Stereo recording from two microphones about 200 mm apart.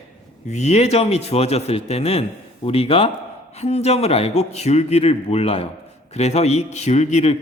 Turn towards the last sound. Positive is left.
turn(degrees=30)  # may be behind; listen again after turning